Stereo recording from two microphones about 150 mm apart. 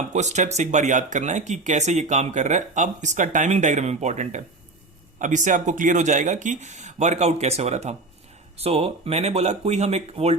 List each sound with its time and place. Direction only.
0.1 s speech: 50° right (ahead or behind)